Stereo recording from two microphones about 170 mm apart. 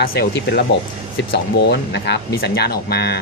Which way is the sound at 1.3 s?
85° left.